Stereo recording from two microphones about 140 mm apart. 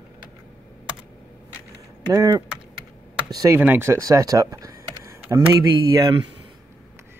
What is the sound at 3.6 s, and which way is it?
Speech, 15° right (ahead or behind).